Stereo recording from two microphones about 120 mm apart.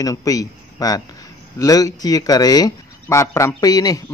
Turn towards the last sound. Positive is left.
turn(degrees=30)  # may be behind; listen again after turning